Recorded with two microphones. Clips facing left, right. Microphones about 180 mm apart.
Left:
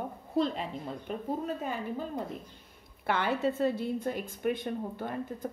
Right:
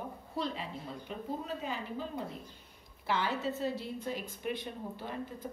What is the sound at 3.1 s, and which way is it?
A woman's voice, 55° left (ahead or behind).